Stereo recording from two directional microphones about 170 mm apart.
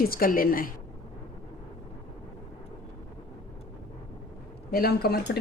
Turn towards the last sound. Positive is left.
turn(degrees=70)  # may be behind; listen again after turning